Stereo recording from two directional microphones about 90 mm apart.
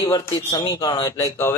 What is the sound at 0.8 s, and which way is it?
Speech, 45° left (ahead or behind).